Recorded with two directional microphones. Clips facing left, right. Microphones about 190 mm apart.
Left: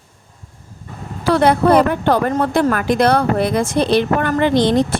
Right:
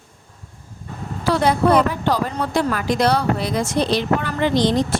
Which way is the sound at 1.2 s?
60° left (ahead or behind).